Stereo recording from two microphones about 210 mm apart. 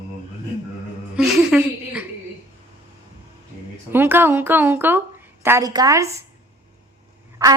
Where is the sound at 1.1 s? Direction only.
5° right (ahead or behind).